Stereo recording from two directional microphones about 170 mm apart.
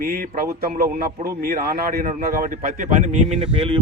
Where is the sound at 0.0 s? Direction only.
55° right (ahead or behind).